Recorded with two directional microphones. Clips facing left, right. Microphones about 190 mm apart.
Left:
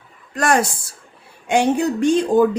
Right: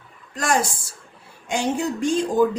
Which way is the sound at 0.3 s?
65° left (ahead or behind).